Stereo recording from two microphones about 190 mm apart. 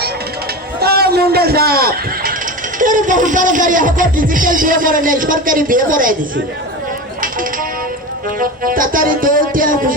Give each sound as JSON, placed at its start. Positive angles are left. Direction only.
{"t": 0.8, "sound": "a man's voice", "side_deg": -55}
{"t": 8.4, "sound": "speech", "side_deg": -45}